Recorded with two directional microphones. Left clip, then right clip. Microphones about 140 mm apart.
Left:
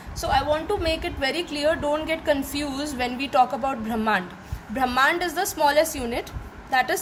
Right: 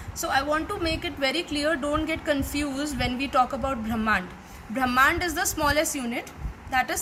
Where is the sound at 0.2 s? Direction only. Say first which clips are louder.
Left 2 dB; 25° left (ahead or behind).